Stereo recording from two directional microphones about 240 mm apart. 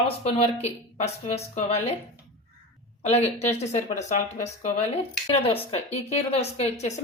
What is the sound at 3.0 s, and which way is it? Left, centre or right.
Speech, left.